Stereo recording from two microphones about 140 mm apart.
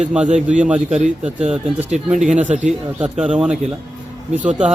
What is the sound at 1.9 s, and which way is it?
Speech, 55° right (ahead or behind).